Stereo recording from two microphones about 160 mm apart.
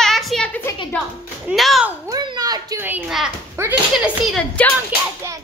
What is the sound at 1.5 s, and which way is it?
Speech, centre (ahead or behind).